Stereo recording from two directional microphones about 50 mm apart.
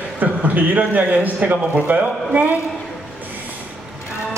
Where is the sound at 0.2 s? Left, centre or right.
Right.